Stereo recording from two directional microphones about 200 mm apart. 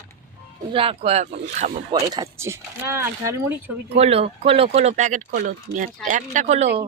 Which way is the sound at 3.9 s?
30° right (ahead or behind).